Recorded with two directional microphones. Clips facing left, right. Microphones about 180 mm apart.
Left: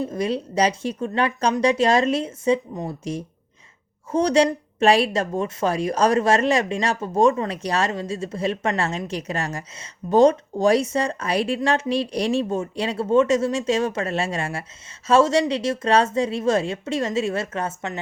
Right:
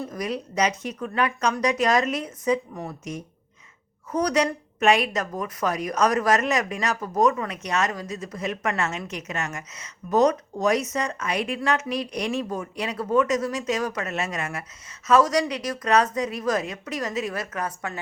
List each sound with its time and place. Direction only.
0.0 s a woman's voice: 30° left (ahead or behind)